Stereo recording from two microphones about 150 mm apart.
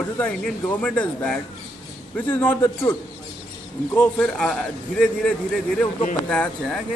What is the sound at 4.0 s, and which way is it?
Speech, 5° left (ahead or behind).